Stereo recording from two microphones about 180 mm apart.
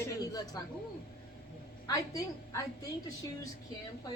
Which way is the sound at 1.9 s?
20° left (ahead or behind).